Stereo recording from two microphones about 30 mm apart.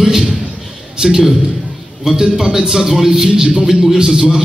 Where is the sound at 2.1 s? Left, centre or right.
Centre.